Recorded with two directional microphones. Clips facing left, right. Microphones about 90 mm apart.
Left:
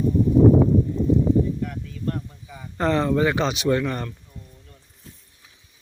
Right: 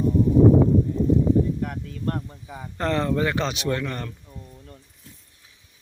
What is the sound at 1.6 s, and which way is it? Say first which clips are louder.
Speech: even; 45° right (ahead or behind).